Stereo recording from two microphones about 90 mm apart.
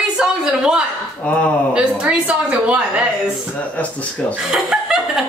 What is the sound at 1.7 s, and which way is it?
Speech, 10° right (ahead or behind).